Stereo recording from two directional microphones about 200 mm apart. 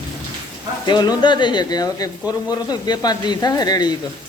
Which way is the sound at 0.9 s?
20° left (ahead or behind).